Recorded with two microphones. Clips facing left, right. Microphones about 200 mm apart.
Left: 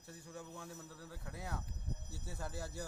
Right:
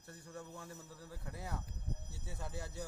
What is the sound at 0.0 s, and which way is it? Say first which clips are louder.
Speech: even; centre (ahead or behind).